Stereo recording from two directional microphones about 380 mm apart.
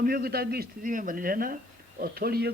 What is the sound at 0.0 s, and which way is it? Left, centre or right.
A man's voice, right.